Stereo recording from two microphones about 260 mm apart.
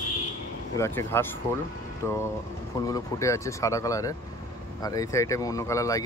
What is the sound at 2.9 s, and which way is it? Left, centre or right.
Speech, centre.